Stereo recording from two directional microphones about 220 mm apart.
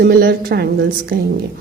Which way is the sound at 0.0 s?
45° right (ahead or behind).